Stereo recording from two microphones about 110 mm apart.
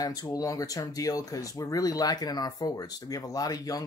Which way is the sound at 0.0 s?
35° left (ahead or behind).